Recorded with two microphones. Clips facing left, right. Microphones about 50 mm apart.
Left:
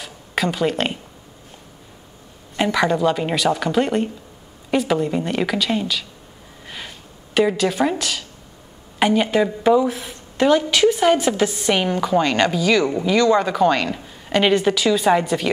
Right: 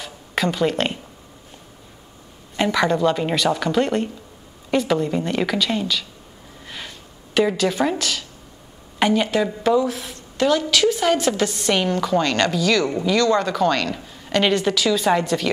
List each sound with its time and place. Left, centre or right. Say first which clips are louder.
0.0 s a sound: even; centre
2.5 s a woman's voice: left 1 dB; centre
7.3 s a woman's voice: left 1 dB; centre